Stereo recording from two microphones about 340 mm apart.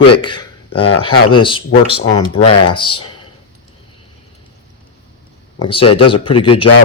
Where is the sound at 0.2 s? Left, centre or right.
Centre.